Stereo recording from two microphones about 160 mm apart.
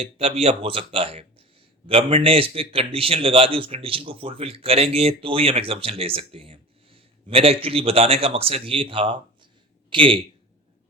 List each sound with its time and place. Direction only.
0.0 s a man's voice: 40° right (ahead or behind)